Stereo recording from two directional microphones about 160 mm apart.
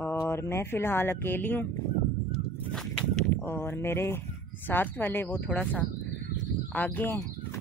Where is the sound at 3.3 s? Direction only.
15° left (ahead or behind).